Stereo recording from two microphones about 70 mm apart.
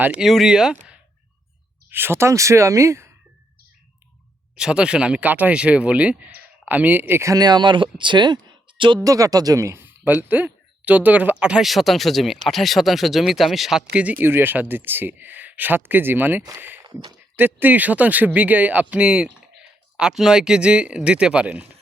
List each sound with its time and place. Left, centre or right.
0.4 s speech: centre
1.9 s speech: right
4.5 s speech: centre
7.3 s speech: right
9.0 s speech: right
9.6 s speech: right; by 11.6 s centre
11.6 s speech: centre
13.9 s speech: right